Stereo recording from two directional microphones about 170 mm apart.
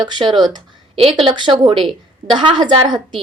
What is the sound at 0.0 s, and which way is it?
A woman's voice, 25° right (ahead or behind).